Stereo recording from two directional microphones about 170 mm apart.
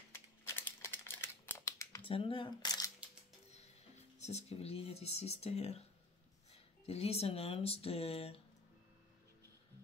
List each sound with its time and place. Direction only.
0.1 s a sound: 15° left (ahead or behind)
2.0 s speech: 30° left (ahead or behind)
4.2 s speech: 40° left (ahead or behind)